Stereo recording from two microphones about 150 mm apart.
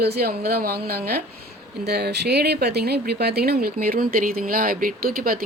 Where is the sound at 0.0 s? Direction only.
90° right.